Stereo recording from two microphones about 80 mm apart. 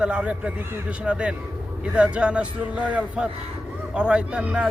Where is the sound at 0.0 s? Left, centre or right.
Centre.